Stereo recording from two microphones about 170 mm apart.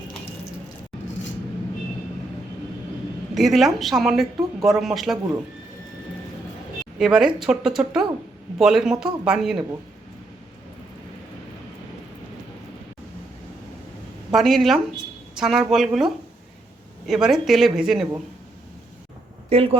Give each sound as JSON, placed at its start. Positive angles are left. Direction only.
{"t": 3.3, "sound": "speech", "side_deg": 0}
{"t": 7.0, "sound": "speech", "side_deg": -5}
{"t": 14.3, "sound": "speech", "side_deg": 0}
{"t": 19.5, "sound": "speech", "side_deg": -35}